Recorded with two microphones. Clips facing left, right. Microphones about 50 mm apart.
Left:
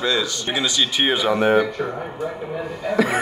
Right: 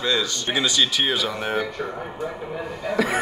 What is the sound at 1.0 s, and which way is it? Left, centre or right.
Speech, left.